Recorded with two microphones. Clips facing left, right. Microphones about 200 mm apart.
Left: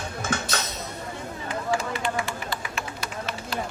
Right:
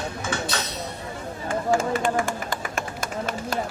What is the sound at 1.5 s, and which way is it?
Run, 45° right (ahead or behind).